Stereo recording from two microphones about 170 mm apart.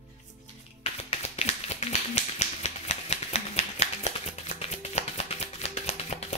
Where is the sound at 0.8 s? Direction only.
35° left (ahead or behind).